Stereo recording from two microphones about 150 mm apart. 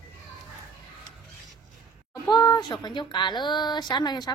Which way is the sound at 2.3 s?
30° left (ahead or behind).